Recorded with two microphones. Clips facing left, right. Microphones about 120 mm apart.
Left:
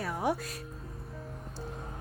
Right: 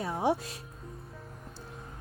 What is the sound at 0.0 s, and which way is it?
Speech, 25° right (ahead or behind).